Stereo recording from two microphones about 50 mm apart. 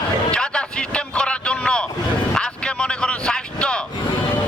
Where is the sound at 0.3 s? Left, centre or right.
Centre.